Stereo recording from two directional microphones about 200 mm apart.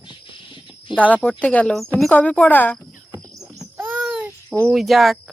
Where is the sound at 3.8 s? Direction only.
10° right (ahead or behind).